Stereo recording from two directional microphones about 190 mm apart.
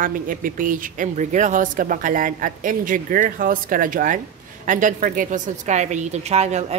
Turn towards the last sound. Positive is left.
turn(degrees=-35)  # may be behind; listen again after turning